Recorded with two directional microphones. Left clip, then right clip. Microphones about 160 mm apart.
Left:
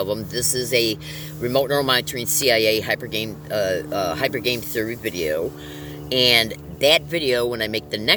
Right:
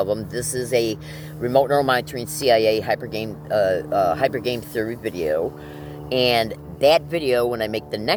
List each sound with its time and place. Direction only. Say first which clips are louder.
0.0 s speech: right 1 dB; 20° left (ahead or behind)